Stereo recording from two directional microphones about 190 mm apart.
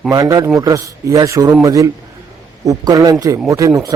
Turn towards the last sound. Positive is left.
turn(degrees=-15)  # may be behind; listen again after turning